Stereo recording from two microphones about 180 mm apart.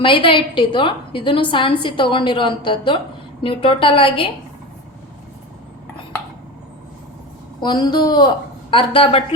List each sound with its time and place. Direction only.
0.0 s a woman's voice: 30° left (ahead or behind)
7.6 s a woman's voice: 25° left (ahead or behind)